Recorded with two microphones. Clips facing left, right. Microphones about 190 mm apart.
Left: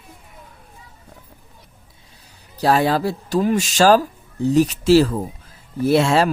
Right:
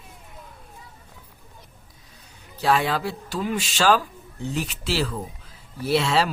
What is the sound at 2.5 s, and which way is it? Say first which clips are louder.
Speech: left 5 dB; 40° left (ahead or behind).